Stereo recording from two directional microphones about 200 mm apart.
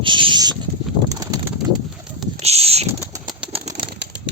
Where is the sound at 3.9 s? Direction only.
60° right (ahead or behind).